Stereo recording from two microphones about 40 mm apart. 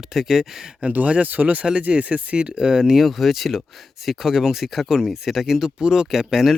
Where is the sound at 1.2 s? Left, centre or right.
Right.